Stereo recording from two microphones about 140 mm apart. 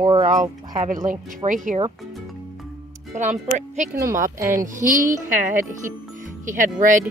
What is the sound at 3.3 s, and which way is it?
Speech, 60° right (ahead or behind).